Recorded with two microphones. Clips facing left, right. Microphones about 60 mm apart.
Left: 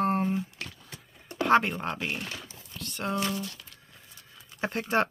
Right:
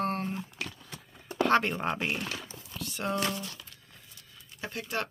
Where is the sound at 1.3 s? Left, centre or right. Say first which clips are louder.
Left 2 dB; centre.